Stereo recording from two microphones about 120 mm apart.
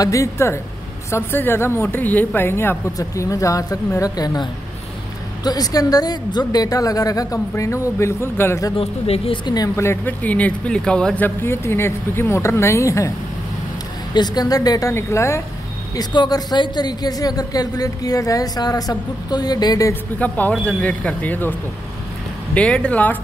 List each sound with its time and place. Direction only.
0.0 s a woman's voice: 25° left (ahead or behind)
8.7 s speech: 55° left (ahead or behind)
9.8 s a woman's voice: 20° left (ahead or behind)
14.1 s a woman's voice: 35° left (ahead or behind)
16.0 s a man's voice: 35° left (ahead or behind)
19.9 s speech: 15° left (ahead or behind)